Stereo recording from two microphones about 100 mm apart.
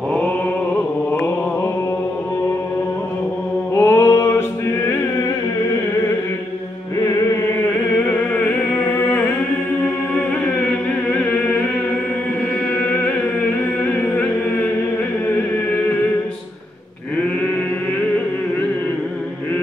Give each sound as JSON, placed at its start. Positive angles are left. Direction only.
{"t": 3.7, "sound": "a sound", "side_deg": 25}
{"t": 8.0, "sound": "music", "side_deg": 20}
{"t": 10.6, "sound": "chant", "side_deg": 15}
{"t": 12.7, "sound": "music", "side_deg": 15}